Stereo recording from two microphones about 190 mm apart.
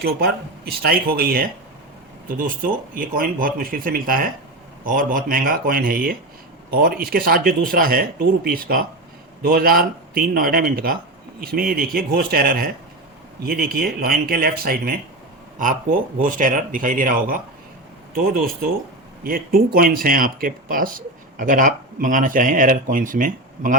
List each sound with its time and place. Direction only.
0.0 s speech: 55° right (ahead or behind)